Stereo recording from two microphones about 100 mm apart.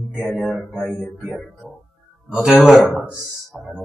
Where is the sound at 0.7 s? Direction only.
5° left (ahead or behind).